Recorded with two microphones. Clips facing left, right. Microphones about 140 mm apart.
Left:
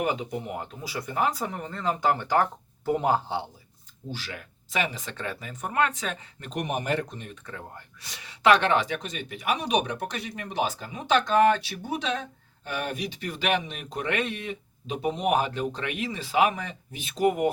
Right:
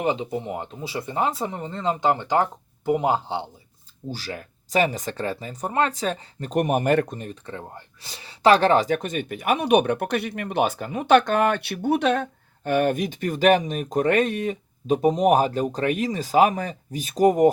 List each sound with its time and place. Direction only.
0.0 s speech: 25° right (ahead or behind)
4.1 s speech: 40° right (ahead or behind)